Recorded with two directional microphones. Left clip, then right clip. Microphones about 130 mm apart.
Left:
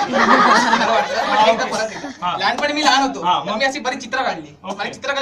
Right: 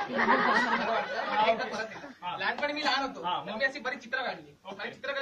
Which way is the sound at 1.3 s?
15° right (ahead or behind).